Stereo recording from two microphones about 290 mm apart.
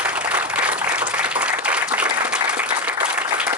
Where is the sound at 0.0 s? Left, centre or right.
Centre.